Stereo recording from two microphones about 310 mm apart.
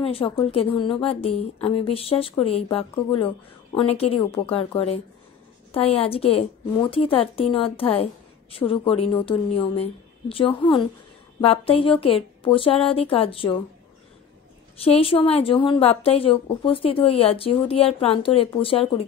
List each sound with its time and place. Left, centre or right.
0.0 s a woman's voice: centre
14.8 s a woman's voice: centre